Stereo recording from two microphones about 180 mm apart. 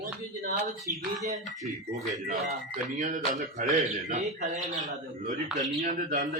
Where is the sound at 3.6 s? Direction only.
40° right (ahead or behind).